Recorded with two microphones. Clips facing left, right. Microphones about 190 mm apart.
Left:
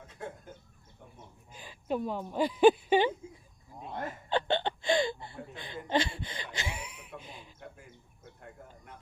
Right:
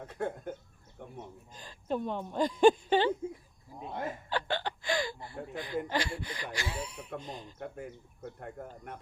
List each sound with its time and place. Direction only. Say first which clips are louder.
0.0 s speech: right 8 dB; 60° right (ahead or behind)
1.5 s a woman's voice: left 1 dB; 10° left (ahead or behind)
4.3 s speech: left 7 dB; 25° left (ahead or behind)
6.7 s speech: right 6 dB; 10° left (ahead or behind)
7.6 s speech: right 9 dB; 60° right (ahead or behind)